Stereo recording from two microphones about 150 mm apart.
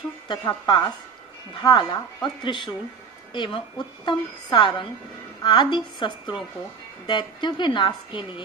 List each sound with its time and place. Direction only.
0.6 s a woman's voice: 30° left (ahead or behind)